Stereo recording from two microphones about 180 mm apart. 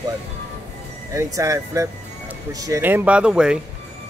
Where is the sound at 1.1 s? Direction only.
20° right (ahead or behind).